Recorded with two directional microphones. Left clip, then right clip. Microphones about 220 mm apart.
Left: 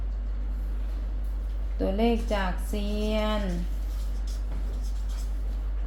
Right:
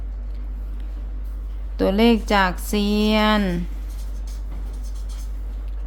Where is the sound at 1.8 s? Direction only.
35° right (ahead or behind).